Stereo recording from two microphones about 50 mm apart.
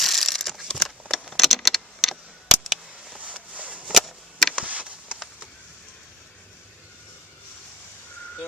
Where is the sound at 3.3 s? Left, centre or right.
Right.